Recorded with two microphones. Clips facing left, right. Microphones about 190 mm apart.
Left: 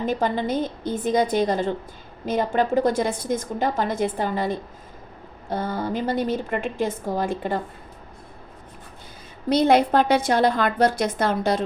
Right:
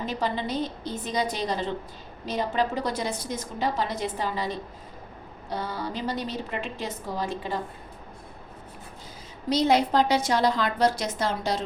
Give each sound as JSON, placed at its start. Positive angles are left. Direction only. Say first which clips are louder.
{"t": 0.0, "sound": "a woman's voice", "louder": "left 5 dB", "side_deg": 50}
{"t": 9.5, "sound": "a woman's voice", "louder": "left 4 dB", "side_deg": 55}